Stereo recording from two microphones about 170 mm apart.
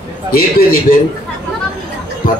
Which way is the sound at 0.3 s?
60° left (ahead or behind).